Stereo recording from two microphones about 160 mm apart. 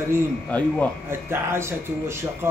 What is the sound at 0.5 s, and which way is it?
Speech, 10° left (ahead or behind).